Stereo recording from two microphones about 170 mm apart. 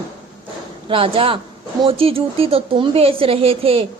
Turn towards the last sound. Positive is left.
turn(degrees=-35)  # may be behind; listen again after turning